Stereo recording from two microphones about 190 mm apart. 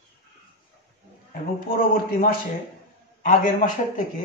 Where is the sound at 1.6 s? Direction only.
50° left (ahead or behind).